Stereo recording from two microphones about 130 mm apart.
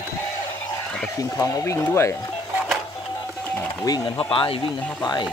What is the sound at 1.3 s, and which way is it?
Speech, 25° left (ahead or behind).